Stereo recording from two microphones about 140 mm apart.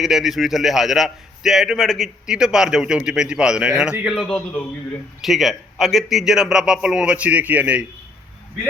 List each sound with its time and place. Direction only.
0.0 s a man's voice: centre (ahead or behind)